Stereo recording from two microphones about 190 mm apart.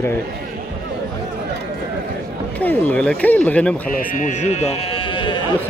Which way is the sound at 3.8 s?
45° left (ahead or behind).